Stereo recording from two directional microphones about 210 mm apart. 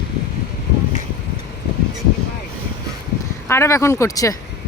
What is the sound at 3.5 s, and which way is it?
Speech, 15° left (ahead or behind).